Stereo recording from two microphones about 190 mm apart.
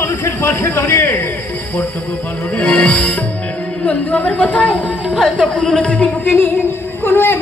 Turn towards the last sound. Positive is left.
turn(degrees=10)  # may be behind; listen again after turning